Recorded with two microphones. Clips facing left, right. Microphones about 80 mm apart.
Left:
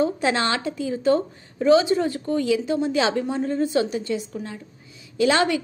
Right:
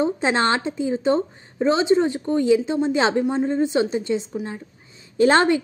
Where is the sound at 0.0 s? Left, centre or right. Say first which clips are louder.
Right 1 dB; right.